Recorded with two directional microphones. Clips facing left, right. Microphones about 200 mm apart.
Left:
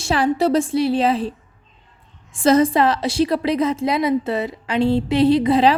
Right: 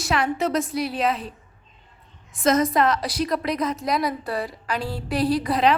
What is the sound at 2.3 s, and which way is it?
A woman's voice, 30° left (ahead or behind).